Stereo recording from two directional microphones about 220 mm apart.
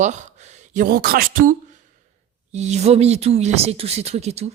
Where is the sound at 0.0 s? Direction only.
35° right (ahead or behind).